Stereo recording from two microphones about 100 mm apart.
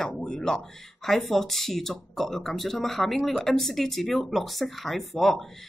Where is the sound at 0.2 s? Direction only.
5° left (ahead or behind).